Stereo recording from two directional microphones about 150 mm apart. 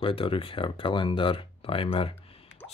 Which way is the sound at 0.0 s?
35° left (ahead or behind).